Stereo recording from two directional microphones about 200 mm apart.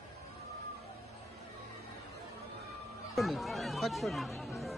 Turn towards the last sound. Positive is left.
turn(degrees=0)  # may be behind; listen again after turning